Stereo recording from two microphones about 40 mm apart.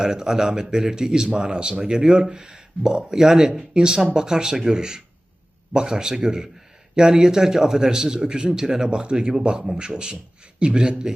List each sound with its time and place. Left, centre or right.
0.0 s a man's voice: centre